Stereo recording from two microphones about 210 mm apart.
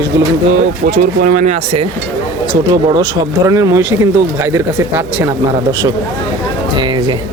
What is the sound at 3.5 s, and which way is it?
Speech, 15° right (ahead or behind).